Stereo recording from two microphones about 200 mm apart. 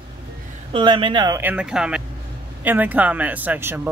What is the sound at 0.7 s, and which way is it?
Speech, 25° right (ahead or behind).